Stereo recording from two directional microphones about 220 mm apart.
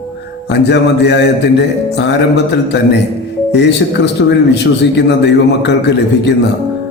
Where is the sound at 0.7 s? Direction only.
50° left (ahead or behind).